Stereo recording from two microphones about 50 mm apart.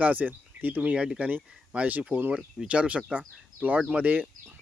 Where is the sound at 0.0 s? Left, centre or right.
Right.